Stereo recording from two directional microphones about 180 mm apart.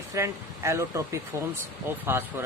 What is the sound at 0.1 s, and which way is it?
Speech, 15° right (ahead or behind).